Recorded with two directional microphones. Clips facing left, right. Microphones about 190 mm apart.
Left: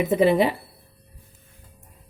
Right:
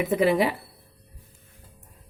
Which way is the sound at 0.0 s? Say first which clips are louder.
Left 3 dB; 25° left (ahead or behind).